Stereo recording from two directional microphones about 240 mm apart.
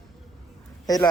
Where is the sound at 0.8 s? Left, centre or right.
Centre.